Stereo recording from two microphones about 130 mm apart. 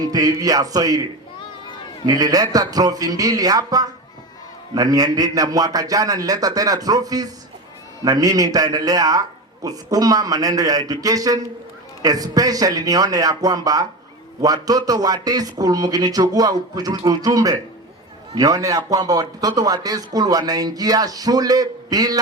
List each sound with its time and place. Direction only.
0.0 s a man's voice: 30° right (ahead or behind)
2.0 s a man's voice: 30° right (ahead or behind)